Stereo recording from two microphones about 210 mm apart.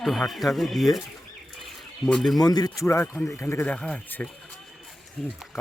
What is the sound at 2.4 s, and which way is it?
Speech, 20° left (ahead or behind).